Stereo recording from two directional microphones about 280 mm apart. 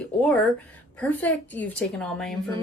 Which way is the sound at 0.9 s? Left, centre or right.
Centre.